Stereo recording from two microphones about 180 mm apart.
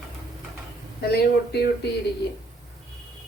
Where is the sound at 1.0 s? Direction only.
60° left (ahead or behind).